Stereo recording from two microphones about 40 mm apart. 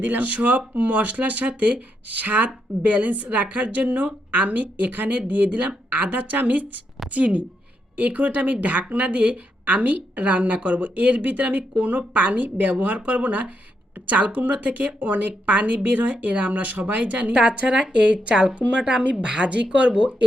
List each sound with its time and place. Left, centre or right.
0.0 s speech: right
17.5 s speech: right